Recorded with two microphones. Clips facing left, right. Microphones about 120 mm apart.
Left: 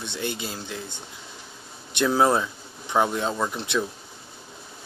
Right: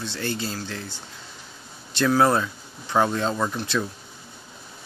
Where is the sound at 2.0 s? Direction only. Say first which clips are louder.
Right 1 dB; 20° left (ahead or behind).